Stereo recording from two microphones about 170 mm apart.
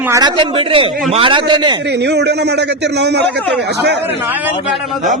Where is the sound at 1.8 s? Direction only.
85° right.